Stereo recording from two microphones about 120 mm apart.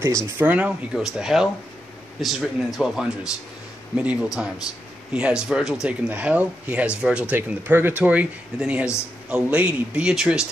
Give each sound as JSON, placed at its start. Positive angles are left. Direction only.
{"t": 0.0, "sound": "speech", "side_deg": -25}
{"t": 0.5, "sound": "speech", "side_deg": -10}